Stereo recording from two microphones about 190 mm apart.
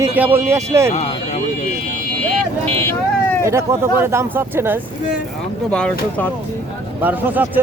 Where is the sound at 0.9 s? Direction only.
35° left (ahead or behind).